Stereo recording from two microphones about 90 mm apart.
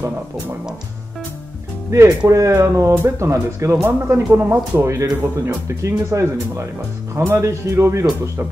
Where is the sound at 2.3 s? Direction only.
35° right (ahead or behind).